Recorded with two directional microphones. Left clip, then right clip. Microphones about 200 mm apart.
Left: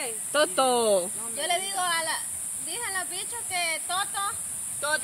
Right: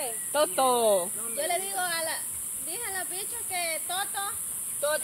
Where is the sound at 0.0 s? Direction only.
60° left (ahead or behind).